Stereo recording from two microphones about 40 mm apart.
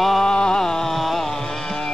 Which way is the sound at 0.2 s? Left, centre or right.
Centre.